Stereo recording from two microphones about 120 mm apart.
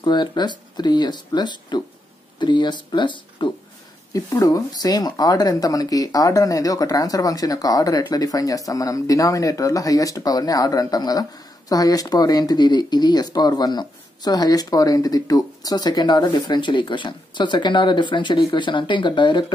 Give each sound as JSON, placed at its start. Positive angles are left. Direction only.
{"t": 0.0, "sound": "speech", "side_deg": 40}